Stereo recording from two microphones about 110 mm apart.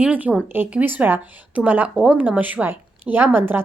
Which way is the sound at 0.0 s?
15° right (ahead or behind).